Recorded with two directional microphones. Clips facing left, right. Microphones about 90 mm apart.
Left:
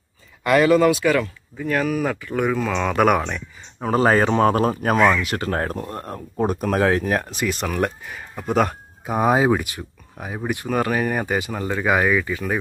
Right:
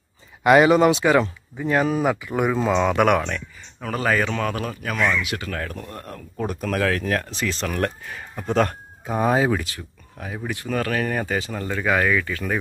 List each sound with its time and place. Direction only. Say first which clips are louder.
0.4 s speech: right 1 dB; 20° right (ahead or behind)
2.0 s speech: right 1 dB; 10° right (ahead or behind)
2.7 s speech: even; 5° right (ahead or behind)
3.8 s speech: left 5 dB; 30° left (ahead or behind)
8.4 s speech: left 1 dB; 5° left (ahead or behind)